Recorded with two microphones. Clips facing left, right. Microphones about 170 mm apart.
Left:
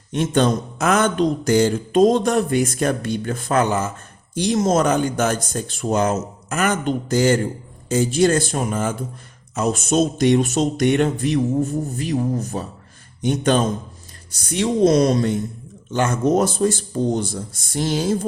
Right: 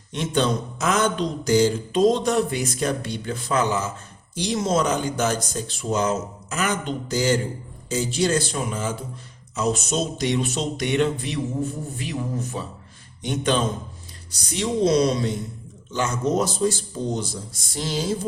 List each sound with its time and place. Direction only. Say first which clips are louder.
0.1 s speech: left 4 dB; 50° left (ahead or behind)